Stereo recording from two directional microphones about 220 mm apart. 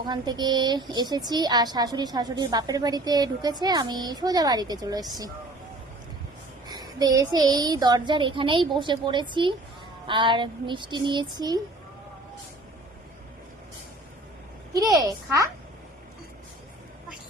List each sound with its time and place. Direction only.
0.1 s a woman's voice: 20° right (ahead or behind)
6.7 s a woman's voice: 20° right (ahead or behind)
14.8 s a child's voice: 15° right (ahead or behind)